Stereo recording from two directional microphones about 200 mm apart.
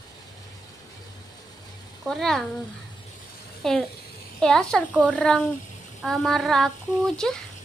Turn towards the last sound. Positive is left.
turn(degrees=0)  # may be behind; listen again after turning